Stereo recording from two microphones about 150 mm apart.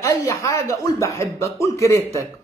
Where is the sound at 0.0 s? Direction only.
25° left (ahead or behind).